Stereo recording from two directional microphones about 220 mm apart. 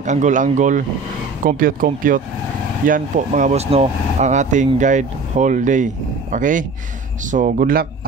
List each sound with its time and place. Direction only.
0.0 s speech: 35° right (ahead or behind)